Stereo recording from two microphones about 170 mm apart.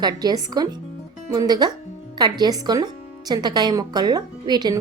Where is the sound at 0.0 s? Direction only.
25° right (ahead or behind).